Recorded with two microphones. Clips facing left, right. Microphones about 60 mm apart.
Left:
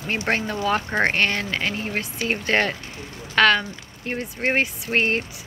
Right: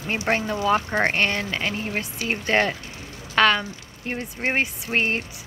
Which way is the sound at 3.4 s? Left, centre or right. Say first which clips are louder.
Left 1 dB; right.